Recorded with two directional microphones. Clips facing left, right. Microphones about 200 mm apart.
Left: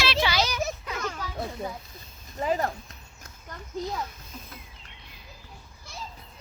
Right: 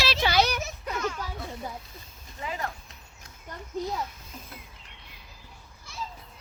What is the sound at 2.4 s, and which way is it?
Speech, 40° left (ahead or behind).